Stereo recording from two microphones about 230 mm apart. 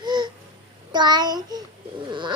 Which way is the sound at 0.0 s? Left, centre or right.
Centre.